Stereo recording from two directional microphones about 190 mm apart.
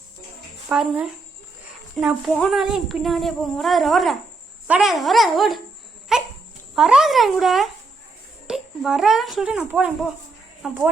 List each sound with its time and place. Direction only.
0.7 s a woman's voice: 5° right (ahead or behind)
6.1 s dog: centre (ahead or behind)
6.7 s a woman's voice: centre (ahead or behind)